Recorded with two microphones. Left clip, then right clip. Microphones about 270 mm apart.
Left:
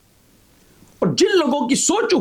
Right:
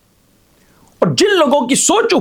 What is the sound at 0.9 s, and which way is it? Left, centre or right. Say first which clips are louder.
Speech: right 5 dB; right.